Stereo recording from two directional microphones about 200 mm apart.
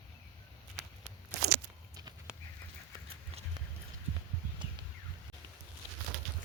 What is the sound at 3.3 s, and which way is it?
Clip-clop, 30° right (ahead or behind).